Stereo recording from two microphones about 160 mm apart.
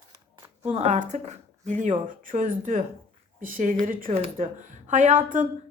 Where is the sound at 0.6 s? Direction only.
40° right (ahead or behind).